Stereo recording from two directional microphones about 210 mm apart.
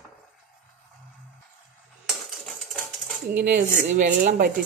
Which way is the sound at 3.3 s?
50° right (ahead or behind).